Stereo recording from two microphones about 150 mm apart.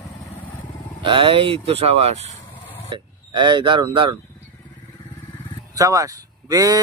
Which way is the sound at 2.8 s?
35° right (ahead or behind).